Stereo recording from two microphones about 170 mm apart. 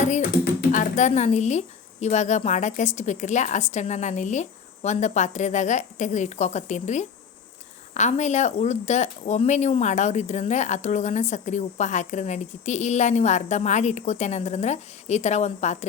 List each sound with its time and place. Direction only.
0.7 s speech: 45° left (ahead or behind)